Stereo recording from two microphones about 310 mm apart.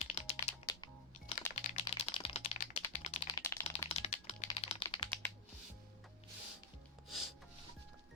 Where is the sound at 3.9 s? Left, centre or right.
Centre.